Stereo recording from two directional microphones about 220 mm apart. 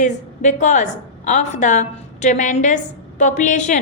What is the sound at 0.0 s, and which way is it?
A woman's voice, 35° left (ahead or behind).